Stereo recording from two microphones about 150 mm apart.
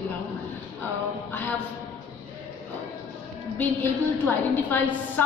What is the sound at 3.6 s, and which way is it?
A woman's voice, 15° left (ahead or behind).